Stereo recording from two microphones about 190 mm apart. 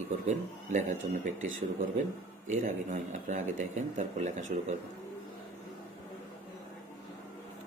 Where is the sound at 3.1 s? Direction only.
40° right (ahead or behind).